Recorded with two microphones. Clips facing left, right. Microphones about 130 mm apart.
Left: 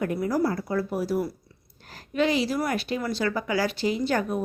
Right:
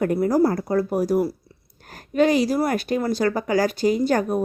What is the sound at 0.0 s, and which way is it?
A woman's voice, 45° right (ahead or behind).